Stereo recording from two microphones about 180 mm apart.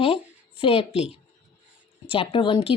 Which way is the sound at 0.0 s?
30° left (ahead or behind).